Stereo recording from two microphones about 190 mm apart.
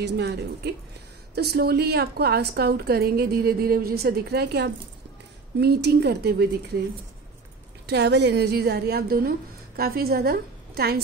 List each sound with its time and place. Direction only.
0.0 s a woman's voice: 65° right (ahead or behind)
7.8 s a woman's voice: 60° right (ahead or behind)